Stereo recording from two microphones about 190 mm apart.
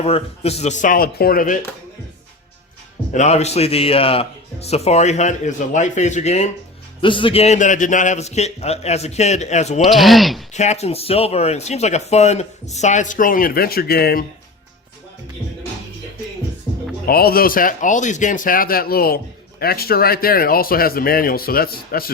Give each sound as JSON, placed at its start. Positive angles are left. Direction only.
{"t": 0.0, "sound": "speech", "side_deg": 35}
{"t": 3.1, "sound": "speech", "side_deg": 35}
{"t": 7.0, "sound": "speech", "side_deg": 25}
{"t": 9.8, "sound": "speech", "side_deg": 0}
{"t": 10.5, "sound": "speech", "side_deg": 35}
{"t": 17.1, "sound": "speech", "side_deg": 50}